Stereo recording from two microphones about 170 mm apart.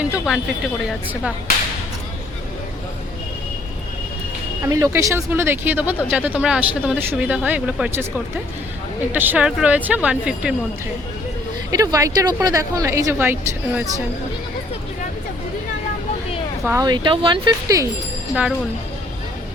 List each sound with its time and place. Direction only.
0.0 s speech: 10° right (ahead or behind)
4.6 s speech: 20° right (ahead or behind)
9.1 s speech: 10° right (ahead or behind)
11.7 s a woman's voice: 20° right (ahead or behind)
16.8 s a woman's voice: 25° right (ahead or behind)